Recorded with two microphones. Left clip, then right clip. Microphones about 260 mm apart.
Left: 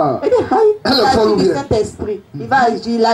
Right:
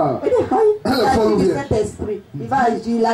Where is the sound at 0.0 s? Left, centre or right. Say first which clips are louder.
Left 3 dB; left.